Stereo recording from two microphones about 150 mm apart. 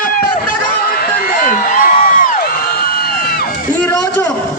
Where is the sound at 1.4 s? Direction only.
65° left (ahead or behind).